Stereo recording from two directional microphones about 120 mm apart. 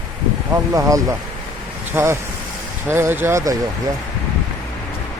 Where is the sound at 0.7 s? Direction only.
25° right (ahead or behind).